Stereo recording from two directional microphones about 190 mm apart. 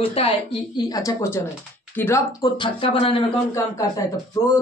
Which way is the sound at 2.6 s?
30° left (ahead or behind).